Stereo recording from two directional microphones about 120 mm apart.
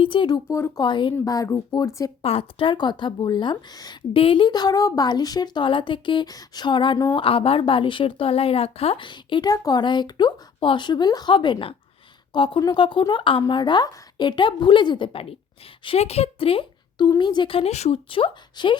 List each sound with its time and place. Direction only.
0.0 s a woman's voice: 40° left (ahead or behind)
0.4 s speech: 25° left (ahead or behind)
0.8 s a woman's voice: 40° left (ahead or behind)
1.1 s speech: 30° left (ahead or behind)
2.2 s a woman's voice: 50° left (ahead or behind); by 3.9 s 35° left (ahead or behind)
4.1 s a woman's voice: 50° left (ahead or behind)
7.2 s a woman's voice: 50° left (ahead or behind)